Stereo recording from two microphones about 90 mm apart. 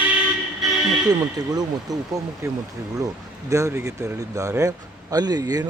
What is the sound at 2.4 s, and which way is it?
Speech, 30° right (ahead or behind).